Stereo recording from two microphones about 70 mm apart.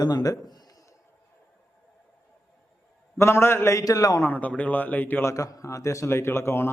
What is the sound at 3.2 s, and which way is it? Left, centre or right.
Speech, left.